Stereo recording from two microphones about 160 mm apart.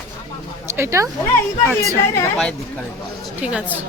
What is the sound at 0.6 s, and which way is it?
Speech, 15° right (ahead or behind).